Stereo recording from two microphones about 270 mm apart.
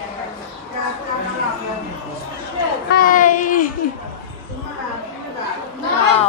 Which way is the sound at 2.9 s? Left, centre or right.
Left.